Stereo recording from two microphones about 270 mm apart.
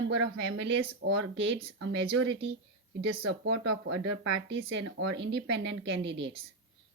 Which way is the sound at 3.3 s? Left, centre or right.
Right.